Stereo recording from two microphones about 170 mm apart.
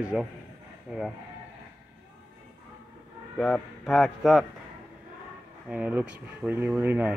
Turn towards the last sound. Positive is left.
turn(degrees=-10)  # may be behind; listen again after turning